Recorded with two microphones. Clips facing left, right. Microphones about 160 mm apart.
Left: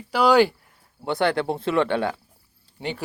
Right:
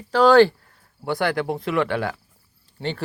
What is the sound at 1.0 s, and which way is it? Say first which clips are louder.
Speech: left 1 dB; 25° left (ahead or behind).